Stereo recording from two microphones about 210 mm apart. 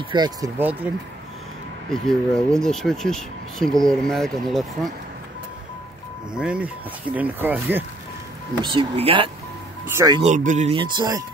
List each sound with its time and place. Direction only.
0.1 s speech: 20° right (ahead or behind)
1.9 s speech: 5° left (ahead or behind)
6.3 s speech: 5° right (ahead or behind)
8.6 s speech: 25° right (ahead or behind)
9.8 s speech: 15° right (ahead or behind)
10.2 s speech: 35° right (ahead or behind); by 11.2 s 20° right (ahead or behind)